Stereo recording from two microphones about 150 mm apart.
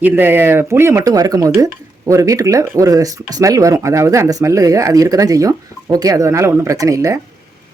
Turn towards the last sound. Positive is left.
turn(degrees=-20)  # may be behind; listen again after turning